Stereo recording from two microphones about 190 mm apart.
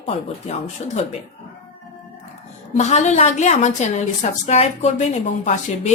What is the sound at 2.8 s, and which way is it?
A woman's voice, 35° left (ahead or behind).